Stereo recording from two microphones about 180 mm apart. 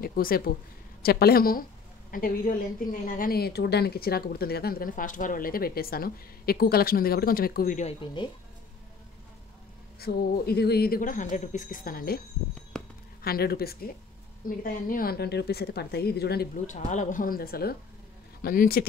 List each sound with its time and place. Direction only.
0.0 s a woman's voice: 55° left (ahead or behind)
8.0 s speech: 25° left (ahead or behind)
9.9 s speech: 60° left (ahead or behind)
13.2 s a woman's voice: 60° left (ahead or behind)
16.6 s a woman's voice: 45° left (ahead or behind)